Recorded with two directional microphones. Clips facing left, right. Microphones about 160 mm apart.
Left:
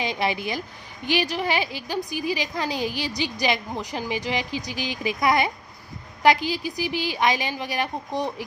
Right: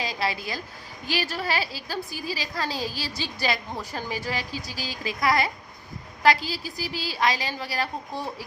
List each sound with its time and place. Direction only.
0.0 s a woman's voice: 20° left (ahead or behind)